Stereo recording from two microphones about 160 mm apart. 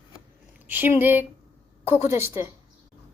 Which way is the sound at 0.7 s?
15° right (ahead or behind).